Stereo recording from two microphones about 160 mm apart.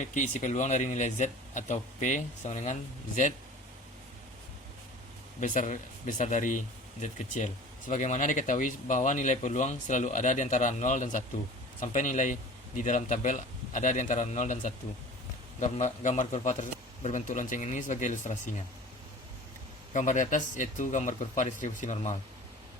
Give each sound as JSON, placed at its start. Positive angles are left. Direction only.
{"t": 0.0, "sound": "speech", "side_deg": 50}
{"t": 5.4, "sound": "speech", "side_deg": 50}
{"t": 19.9, "sound": "speech", "side_deg": 50}